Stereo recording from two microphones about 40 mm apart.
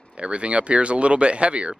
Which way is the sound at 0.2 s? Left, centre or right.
Right.